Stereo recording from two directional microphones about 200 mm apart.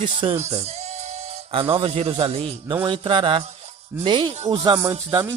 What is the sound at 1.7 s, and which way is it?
Speech, 30° right (ahead or behind).